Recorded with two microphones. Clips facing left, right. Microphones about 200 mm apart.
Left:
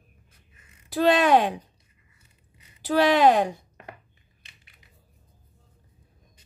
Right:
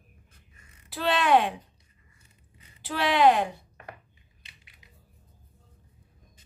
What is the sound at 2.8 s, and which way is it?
Speech, 40° left (ahead or behind).